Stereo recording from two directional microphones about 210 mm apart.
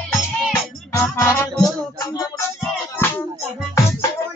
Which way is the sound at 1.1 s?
10° left (ahead or behind).